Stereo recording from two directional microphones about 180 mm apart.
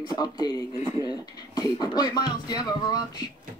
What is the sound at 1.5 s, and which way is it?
Speech, 25° left (ahead or behind).